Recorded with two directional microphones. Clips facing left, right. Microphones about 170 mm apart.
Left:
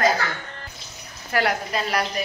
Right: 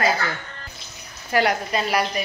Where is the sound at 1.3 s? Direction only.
Centre (ahead or behind).